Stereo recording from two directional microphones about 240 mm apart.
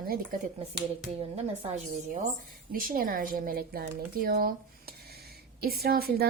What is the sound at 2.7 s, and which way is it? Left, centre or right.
A woman's voice, right.